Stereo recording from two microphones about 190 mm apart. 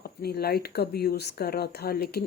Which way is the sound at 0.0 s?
55° left (ahead or behind).